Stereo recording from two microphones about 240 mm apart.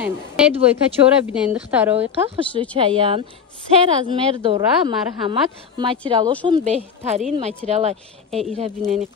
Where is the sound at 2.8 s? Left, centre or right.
Right.